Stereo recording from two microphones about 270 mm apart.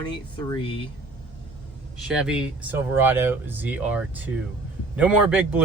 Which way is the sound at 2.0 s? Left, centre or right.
Centre.